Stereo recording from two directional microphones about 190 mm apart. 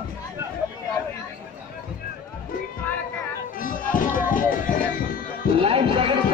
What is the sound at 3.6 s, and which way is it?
Music, 45° left (ahead or behind).